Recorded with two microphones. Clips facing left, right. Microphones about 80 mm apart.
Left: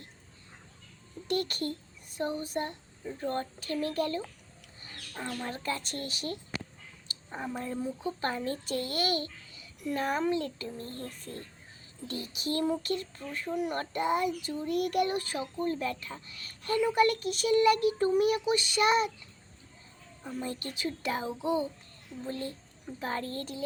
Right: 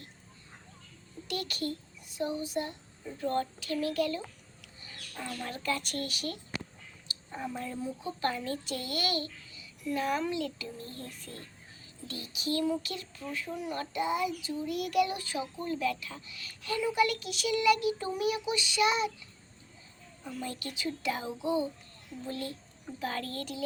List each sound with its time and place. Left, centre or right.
1.3 s child singing: left
3.2 s a child's voice: left
20.2 s a child's voice: left